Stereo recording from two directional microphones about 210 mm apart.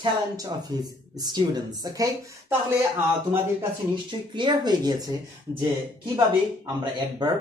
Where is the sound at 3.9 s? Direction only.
20° right (ahead or behind).